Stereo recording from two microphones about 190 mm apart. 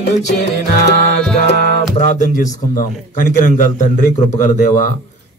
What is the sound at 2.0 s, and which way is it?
A man's voice, 40° left (ahead or behind).